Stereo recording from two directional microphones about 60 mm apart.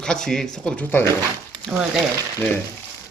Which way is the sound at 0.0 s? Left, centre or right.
Centre.